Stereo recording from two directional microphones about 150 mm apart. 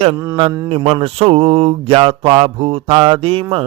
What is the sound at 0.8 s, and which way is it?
Mantra, 35° right (ahead or behind).